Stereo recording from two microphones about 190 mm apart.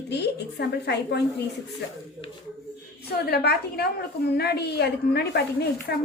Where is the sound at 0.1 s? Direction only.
60° left (ahead or behind).